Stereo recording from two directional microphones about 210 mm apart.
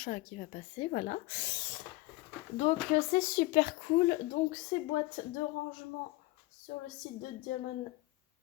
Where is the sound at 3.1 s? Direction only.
40° left (ahead or behind).